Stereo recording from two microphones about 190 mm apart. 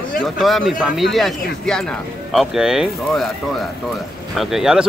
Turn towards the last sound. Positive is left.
turn(degrees=0)  # may be behind; listen again after turning